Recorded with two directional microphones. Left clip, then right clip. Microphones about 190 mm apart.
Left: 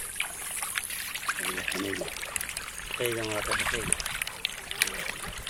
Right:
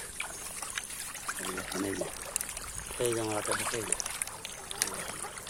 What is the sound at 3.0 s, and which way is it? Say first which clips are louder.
Speech: even; centre (ahead or behind).